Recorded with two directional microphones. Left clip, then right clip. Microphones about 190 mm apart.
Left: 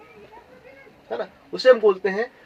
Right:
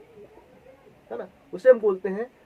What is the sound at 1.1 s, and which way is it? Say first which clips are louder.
Speech: left 6 dB; 25° left (ahead or behind).